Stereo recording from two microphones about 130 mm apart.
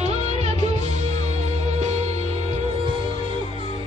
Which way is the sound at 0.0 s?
55° right (ahead or behind).